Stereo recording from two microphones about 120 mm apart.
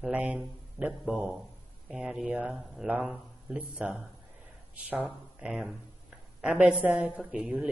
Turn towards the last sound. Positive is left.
turn(degrees=-10)  # may be behind; listen again after turning